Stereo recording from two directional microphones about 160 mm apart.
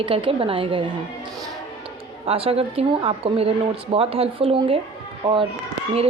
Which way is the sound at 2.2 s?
35° right (ahead or behind).